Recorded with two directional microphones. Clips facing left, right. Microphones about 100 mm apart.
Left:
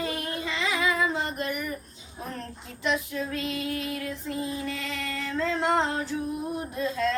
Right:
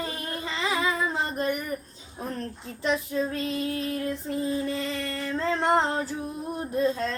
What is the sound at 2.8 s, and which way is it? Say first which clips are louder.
Female singing: right 2 dB; 30° right (ahead or behind).